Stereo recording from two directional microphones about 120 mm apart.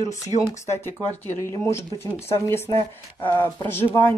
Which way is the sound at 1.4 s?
20° left (ahead or behind).